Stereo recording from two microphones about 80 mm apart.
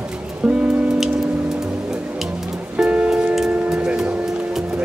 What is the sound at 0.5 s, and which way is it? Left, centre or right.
Music, centre.